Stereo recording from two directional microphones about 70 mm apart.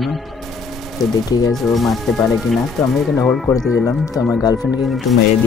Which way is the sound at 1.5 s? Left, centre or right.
Centre.